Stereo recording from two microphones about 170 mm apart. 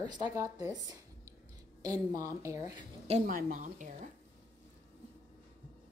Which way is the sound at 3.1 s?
50° right (ahead or behind).